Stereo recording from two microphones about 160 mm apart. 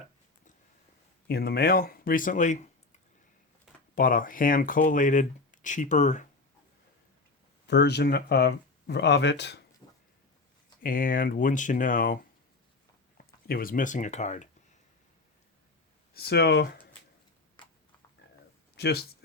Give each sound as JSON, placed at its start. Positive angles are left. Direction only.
{"t": 1.3, "sound": "speech", "side_deg": 80}
{"t": 3.9, "sound": "speech", "side_deg": 60}
{"t": 7.7, "sound": "speech", "side_deg": 90}
{"t": 10.8, "sound": "speech", "side_deg": 60}
{"t": 16.1, "sound": "speech", "side_deg": 85}
{"t": 17.6, "sound": "a sound", "side_deg": 30}
{"t": 18.8, "sound": "speech", "side_deg": 90}